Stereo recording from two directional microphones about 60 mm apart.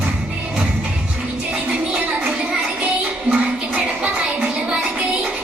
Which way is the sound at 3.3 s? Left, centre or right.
Centre.